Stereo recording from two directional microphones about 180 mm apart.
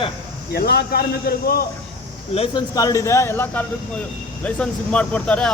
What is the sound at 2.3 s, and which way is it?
Speech, 30° left (ahead or behind).